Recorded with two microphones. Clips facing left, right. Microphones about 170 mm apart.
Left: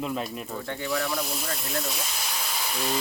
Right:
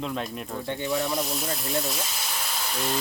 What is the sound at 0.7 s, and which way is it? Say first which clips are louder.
Speech: right 2 dB; 25° right (ahead or behind).